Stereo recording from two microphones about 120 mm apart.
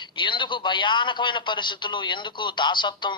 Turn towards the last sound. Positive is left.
turn(degrees=40)  # may be behind; listen again after turning